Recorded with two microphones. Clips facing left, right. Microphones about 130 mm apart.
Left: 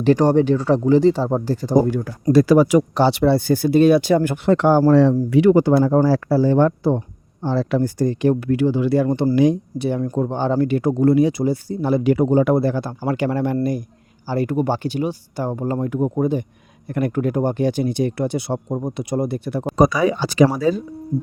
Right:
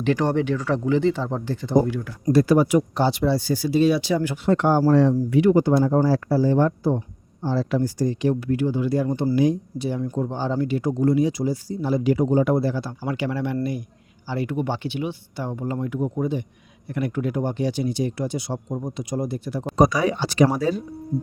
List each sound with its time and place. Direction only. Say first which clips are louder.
0.0 s speech: left 6 dB; 35° left (ahead or behind)
2.2 s speech: left 4 dB; 90° left; by 4.4 s 50° left (ahead or behind)
4.4 s speech: left 4 dB; 90° left; by 8.4 s 50° left (ahead or behind)
8.4 s speech: left 4 dB; 90° left; by 19.6 s 60° left (ahead or behind)